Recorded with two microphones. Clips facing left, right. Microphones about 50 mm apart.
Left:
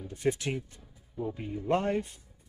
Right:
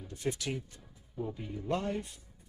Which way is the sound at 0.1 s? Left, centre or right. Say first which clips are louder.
Left 5 dB; left.